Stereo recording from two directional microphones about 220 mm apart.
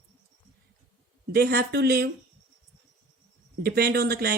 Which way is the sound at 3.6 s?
45° right (ahead or behind).